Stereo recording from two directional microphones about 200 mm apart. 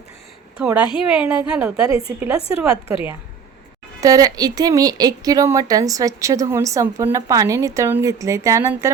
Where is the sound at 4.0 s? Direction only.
20° right (ahead or behind).